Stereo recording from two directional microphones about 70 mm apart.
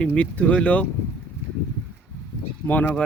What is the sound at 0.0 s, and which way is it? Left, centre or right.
Speech, centre.